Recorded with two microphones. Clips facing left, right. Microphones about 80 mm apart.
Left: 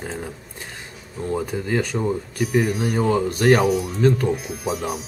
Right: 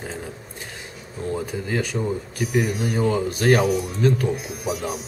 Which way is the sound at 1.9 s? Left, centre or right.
Left.